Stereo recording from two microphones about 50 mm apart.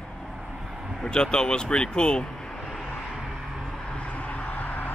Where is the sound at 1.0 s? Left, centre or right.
Centre.